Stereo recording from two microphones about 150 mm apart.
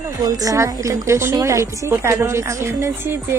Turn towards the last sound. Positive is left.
turn(degrees=-15)  # may be behind; listen again after turning